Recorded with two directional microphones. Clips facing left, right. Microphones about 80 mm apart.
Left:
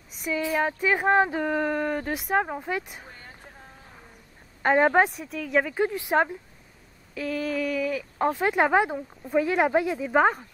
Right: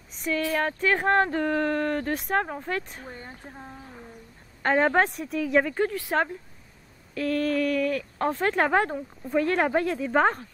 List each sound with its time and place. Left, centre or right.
0.1 s a sound: centre
0.4 s speech: centre
3.1 s speech: right
4.6 s speech: centre
5.9 s speech: centre
7.2 s speech: centre